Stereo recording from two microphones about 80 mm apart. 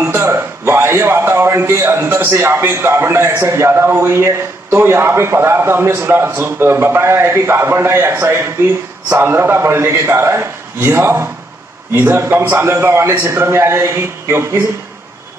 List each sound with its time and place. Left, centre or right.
0.0 s a man's voice: right